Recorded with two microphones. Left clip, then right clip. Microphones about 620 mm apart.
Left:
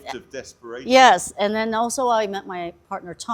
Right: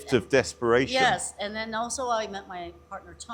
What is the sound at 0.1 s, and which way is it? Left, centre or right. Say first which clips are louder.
Speech: right 10 dB; right.